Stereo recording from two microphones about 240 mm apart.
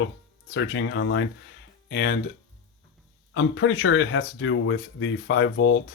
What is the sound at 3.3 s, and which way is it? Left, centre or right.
Speech, left.